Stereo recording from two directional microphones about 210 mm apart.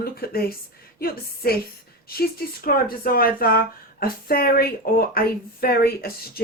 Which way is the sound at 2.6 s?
45° left (ahead or behind).